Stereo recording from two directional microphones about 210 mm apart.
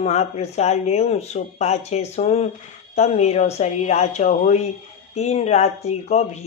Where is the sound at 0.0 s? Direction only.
30° left (ahead or behind).